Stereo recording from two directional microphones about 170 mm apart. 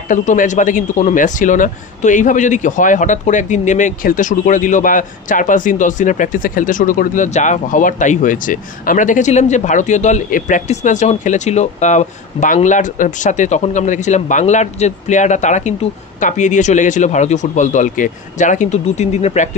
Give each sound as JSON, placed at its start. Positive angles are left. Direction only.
{"t": 0.1, "sound": "speech", "side_deg": 50}